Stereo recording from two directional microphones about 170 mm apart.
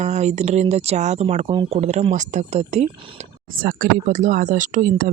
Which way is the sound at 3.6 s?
55° right (ahead or behind).